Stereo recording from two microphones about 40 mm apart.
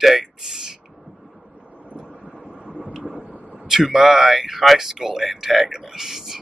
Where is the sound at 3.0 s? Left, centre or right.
Right.